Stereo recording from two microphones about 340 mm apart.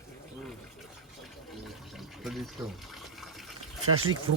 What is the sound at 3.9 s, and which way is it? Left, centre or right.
Speech, right.